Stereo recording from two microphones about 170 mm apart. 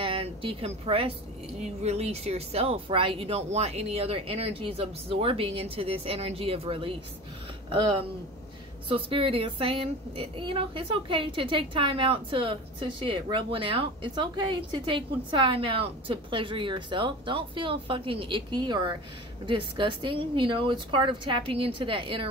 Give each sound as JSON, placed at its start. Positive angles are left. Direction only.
{"t": 0.0, "sound": "a woman's voice", "side_deg": -30}
{"t": 8.8, "sound": "a woman's voice", "side_deg": -30}